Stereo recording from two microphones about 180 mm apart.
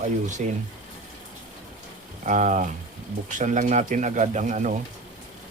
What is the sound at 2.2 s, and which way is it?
Speech, 45° right (ahead or behind).